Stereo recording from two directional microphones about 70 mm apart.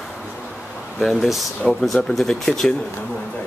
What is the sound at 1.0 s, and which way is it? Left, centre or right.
Speech, centre.